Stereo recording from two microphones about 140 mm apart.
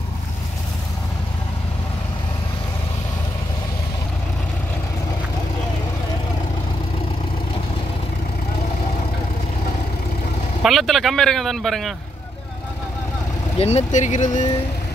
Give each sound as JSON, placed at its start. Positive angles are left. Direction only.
{"t": 10.6, "sound": "speech", "side_deg": 0}
{"t": 13.6, "sound": "speech", "side_deg": 50}